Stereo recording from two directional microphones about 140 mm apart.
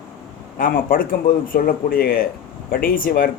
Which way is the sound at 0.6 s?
90° left.